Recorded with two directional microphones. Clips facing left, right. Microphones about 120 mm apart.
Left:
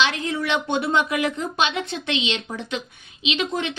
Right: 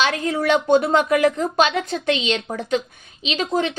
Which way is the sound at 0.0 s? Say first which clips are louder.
Right 3 dB; 40° right (ahead or behind).